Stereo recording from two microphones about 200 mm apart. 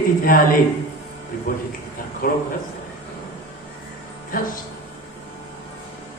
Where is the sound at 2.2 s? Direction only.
50° left (ahead or behind).